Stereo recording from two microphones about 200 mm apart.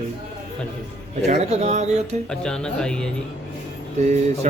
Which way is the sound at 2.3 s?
5° left (ahead or behind).